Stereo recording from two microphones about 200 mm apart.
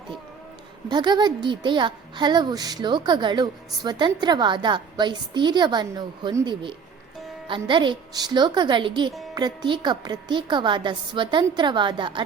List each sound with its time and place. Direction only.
0.9 s a woman's voice: 20° right (ahead or behind)